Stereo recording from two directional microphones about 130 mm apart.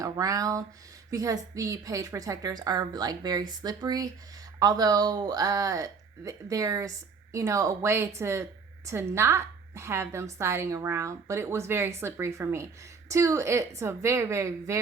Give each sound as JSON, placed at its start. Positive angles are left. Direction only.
{"t": 0.0, "sound": "speech", "side_deg": -25}